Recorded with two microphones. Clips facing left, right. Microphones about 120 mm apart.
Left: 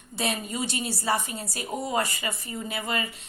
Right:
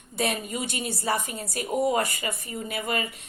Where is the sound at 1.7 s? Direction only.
10° right (ahead or behind).